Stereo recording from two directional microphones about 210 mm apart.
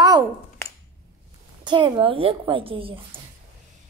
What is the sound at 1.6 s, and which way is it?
A woman's voice, 25° right (ahead or behind).